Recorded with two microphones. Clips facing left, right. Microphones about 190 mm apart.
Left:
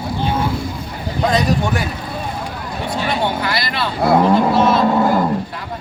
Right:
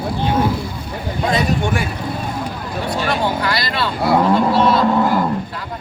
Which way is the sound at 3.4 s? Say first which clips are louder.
Right 1 dB; 25° left (ahead or behind).